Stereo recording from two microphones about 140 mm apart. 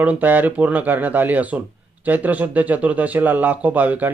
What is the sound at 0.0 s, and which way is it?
A man's voice, 10° right (ahead or behind).